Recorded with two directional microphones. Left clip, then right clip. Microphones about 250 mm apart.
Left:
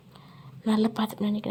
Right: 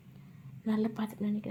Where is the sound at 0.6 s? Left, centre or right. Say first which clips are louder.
Left 8 dB; left.